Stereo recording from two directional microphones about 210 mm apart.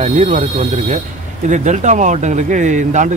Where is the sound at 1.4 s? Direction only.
35° right (ahead or behind).